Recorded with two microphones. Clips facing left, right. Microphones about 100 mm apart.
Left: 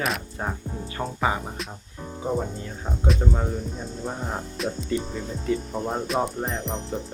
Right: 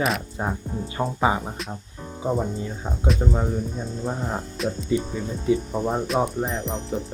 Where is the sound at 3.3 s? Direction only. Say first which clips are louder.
Right 3 dB; centre (ahead or behind).